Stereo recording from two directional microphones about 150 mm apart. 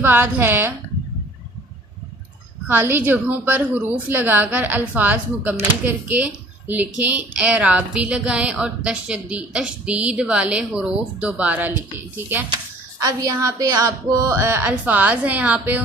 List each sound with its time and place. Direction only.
0.0 s a woman's voice: 15° right (ahead or behind)
2.6 s a woman's voice: 15° right (ahead or behind)